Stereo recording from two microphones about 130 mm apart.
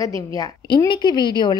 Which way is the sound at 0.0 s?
25° left (ahead or behind).